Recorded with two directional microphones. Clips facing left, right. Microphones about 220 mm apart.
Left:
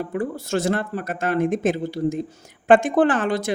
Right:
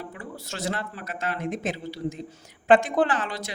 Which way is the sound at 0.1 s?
50° left (ahead or behind).